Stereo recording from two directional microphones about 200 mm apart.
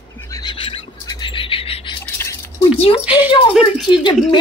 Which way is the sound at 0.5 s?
25° left (ahead or behind).